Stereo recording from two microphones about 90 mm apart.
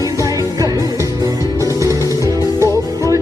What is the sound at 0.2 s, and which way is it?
Music, 40° right (ahead or behind).